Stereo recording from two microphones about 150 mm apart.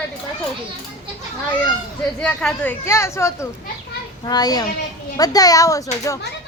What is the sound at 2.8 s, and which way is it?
A child's voice, 20° left (ahead or behind).